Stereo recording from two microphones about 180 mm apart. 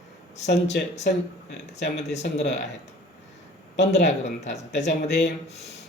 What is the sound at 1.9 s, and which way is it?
Speech, 40° left (ahead or behind).